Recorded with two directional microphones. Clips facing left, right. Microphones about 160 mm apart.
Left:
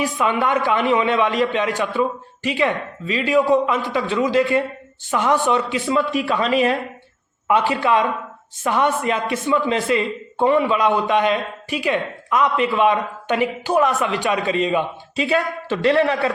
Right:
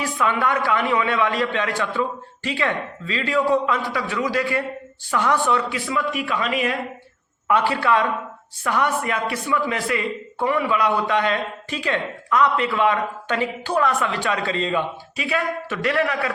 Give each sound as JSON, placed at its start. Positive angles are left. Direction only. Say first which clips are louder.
{"t": 0.0, "sound": "a man's voice", "louder": "left 2 dB", "side_deg": 20}
{"t": 7.4, "sound": "a man's voice", "louder": "left 2 dB", "side_deg": 20}
{"t": 15.1, "sound": "a man's voice", "louder": "left 5 dB", "side_deg": 30}